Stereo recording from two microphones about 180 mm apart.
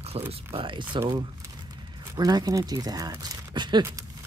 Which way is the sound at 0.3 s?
30° right (ahead or behind).